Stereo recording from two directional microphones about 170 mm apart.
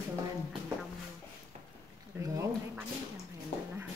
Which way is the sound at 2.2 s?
15° right (ahead or behind).